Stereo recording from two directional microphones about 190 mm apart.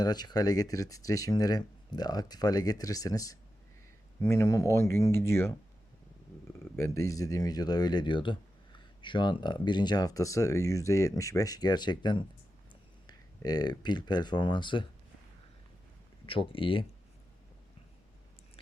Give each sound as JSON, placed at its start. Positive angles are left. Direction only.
{"t": 0.0, "sound": "speech", "side_deg": 20}
{"t": 6.7, "sound": "speech", "side_deg": 15}
{"t": 16.2, "sound": "speech", "side_deg": 30}